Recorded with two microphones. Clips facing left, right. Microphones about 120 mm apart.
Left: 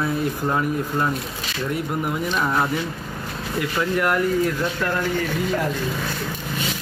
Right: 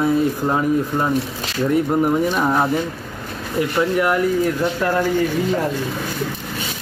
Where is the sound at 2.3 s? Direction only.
20° right (ahead or behind).